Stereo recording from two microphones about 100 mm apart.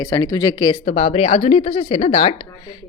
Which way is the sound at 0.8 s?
90° left.